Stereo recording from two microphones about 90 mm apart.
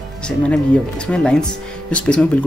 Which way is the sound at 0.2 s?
10° left (ahead or behind).